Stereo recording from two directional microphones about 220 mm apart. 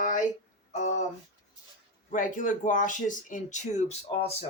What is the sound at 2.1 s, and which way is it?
Speech, 35° left (ahead or behind).